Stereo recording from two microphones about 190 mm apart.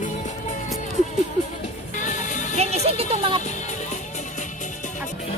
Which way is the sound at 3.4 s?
40° left (ahead or behind).